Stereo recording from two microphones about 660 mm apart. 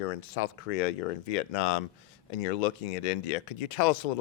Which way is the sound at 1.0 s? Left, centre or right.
Left.